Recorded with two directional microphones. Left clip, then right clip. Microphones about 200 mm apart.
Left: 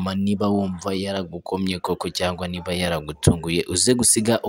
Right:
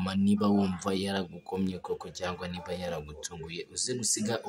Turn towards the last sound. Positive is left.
turn(degrees=40)  # may be behind; listen again after turning